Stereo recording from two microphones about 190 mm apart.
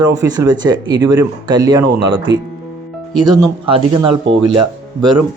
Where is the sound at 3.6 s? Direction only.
25° right (ahead or behind).